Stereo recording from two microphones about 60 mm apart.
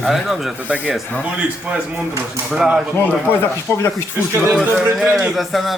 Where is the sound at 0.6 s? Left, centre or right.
Right.